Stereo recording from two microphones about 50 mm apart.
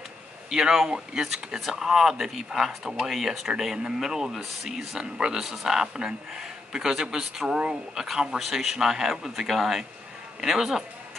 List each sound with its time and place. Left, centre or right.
0.5 s speech: centre
5.4 s speech: centre